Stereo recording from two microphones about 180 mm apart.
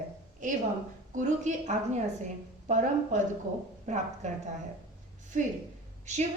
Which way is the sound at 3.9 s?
40° right (ahead or behind).